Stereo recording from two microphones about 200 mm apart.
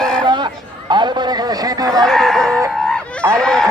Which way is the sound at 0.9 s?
20° right (ahead or behind).